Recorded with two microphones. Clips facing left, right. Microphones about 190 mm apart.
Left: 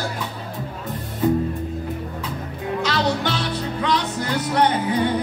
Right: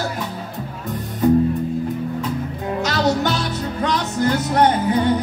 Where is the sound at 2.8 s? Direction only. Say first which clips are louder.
Right 3 dB; 45° right (ahead or behind).